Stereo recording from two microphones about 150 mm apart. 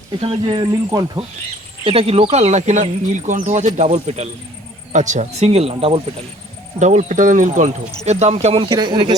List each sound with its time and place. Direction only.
0.2 s speech: 35° right (ahead or behind)
1.8 s speech: 40° right (ahead or behind)
6.7 s speech: 50° right (ahead or behind); by 9.1 s 30° right (ahead or behind)